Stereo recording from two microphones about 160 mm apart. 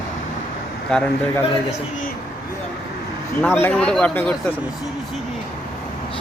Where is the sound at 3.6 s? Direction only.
10° left (ahead or behind).